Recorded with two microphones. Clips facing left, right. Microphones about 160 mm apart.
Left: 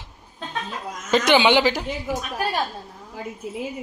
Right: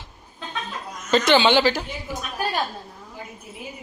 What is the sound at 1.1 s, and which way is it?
Speech, 15° left (ahead or behind).